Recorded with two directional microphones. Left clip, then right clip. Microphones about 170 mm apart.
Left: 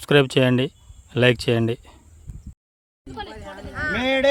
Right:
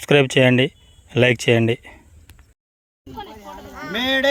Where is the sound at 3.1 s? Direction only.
55° right (ahead or behind).